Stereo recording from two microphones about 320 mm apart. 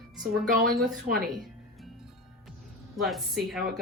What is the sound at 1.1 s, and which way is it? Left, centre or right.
Speech, right.